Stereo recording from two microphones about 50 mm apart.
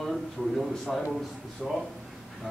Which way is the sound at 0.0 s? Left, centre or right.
Centre.